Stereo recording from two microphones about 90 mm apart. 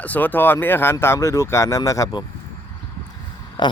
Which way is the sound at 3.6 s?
55° left (ahead or behind).